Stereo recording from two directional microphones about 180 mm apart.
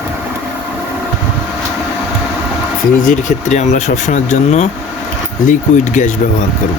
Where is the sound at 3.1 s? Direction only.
40° left (ahead or behind).